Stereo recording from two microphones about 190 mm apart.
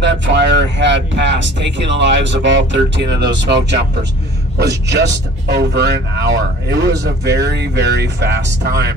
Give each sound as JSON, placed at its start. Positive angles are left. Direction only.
{"t": 0.0, "sound": "speech", "side_deg": -70}
{"t": 4.6, "sound": "speech", "side_deg": -60}